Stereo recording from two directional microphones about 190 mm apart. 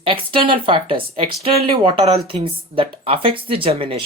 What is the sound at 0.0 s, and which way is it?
Speech, 25° right (ahead or behind).